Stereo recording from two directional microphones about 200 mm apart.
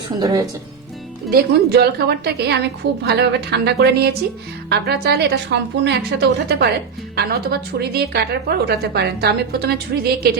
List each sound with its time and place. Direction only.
0.2 s speech: 20° right (ahead or behind)
1.3 s a woman's voice: 55° right (ahead or behind)